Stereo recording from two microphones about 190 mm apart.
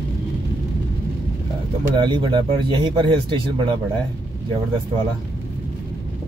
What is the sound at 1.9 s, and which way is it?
Speech, 25° right (ahead or behind).